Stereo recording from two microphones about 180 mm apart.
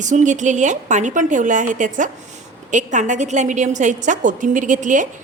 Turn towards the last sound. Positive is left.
turn(degrees=-45)  # may be behind; listen again after turning